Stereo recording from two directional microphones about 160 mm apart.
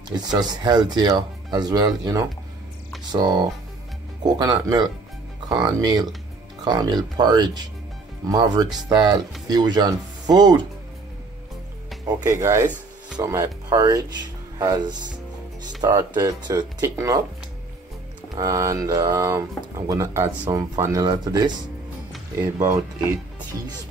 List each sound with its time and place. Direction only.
0.1 s speech: 25° right (ahead or behind)
12.1 s speech: 20° right (ahead or behind)
18.3 s speech: 20° right (ahead or behind)
22.6 s speech: 15° right (ahead or behind)